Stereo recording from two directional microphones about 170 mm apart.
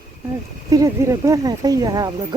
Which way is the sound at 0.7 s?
20° right (ahead or behind).